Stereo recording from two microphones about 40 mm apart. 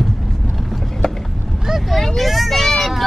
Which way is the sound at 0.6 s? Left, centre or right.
Centre.